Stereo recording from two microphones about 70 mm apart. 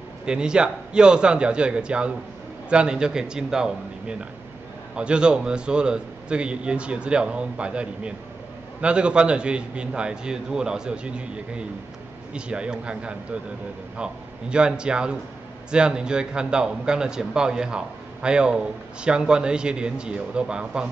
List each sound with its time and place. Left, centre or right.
0.2 s a man's voice: centre